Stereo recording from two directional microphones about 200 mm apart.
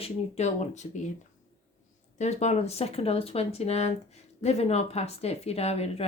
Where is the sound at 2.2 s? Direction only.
35° left (ahead or behind).